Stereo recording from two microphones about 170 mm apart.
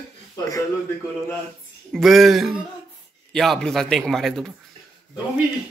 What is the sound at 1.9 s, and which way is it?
Speech, centre (ahead or behind).